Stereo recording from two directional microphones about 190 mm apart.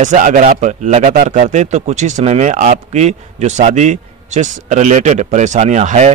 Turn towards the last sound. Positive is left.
turn(degrees=-40)  # may be behind; listen again after turning